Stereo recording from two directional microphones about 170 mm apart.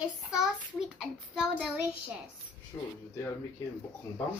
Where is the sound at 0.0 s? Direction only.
5° right (ahead or behind).